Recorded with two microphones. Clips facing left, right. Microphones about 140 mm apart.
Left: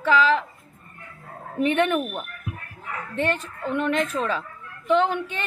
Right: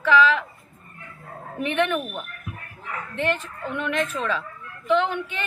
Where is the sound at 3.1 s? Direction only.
40° left (ahead or behind).